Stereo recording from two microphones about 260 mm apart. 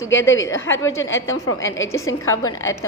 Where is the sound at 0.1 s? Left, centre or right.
Left.